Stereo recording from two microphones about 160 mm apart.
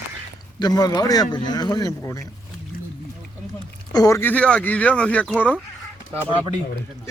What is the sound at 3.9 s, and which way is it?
Speech, 20° left (ahead or behind).